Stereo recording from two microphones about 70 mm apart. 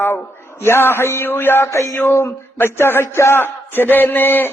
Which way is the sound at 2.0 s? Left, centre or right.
Left.